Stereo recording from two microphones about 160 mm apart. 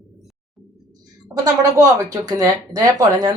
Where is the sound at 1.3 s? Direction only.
20° right (ahead or behind).